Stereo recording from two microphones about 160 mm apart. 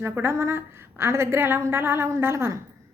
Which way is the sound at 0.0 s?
15° right (ahead or behind).